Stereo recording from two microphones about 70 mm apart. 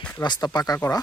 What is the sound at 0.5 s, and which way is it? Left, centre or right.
Speech, left.